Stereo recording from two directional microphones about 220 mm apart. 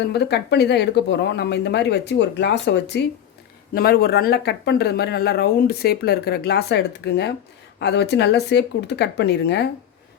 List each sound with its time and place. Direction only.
0.1 s speech: 50° left (ahead or behind)